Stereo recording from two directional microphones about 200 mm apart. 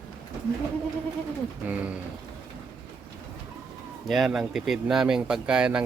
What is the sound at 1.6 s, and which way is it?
Speech, 5° right (ahead or behind).